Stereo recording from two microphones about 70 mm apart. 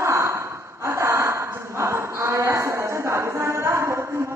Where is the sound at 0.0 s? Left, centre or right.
Right.